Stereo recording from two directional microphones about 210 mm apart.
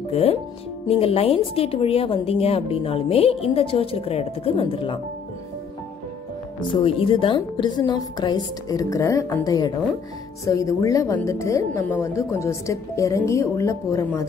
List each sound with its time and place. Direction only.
0.1 s speech: 30° left (ahead or behind)
6.7 s a woman's voice: 25° left (ahead or behind)